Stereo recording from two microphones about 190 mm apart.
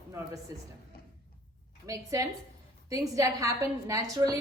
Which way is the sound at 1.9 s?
20° right (ahead or behind).